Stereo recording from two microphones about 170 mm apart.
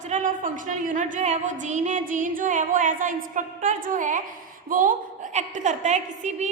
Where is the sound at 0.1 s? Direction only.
45° right (ahead or behind).